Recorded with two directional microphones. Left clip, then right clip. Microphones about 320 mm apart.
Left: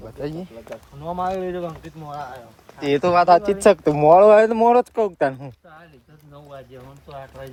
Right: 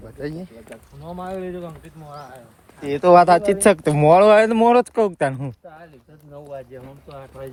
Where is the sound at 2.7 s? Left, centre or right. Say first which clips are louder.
Left 5 dB; left.